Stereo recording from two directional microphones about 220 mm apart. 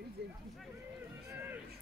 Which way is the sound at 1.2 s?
10° right (ahead or behind).